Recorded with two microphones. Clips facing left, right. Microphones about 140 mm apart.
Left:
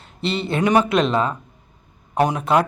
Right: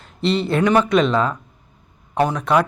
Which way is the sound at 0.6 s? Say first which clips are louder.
Left 1 dB; 15° left (ahead or behind).